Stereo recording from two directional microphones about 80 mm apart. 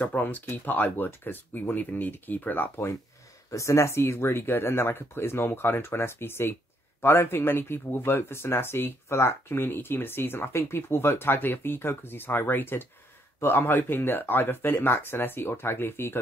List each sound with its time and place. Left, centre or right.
0.0 s speech: left
3.5 s speech: left